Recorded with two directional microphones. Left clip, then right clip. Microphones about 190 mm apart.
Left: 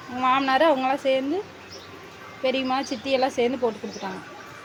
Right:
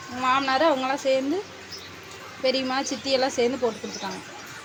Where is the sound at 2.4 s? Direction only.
5° left (ahead or behind).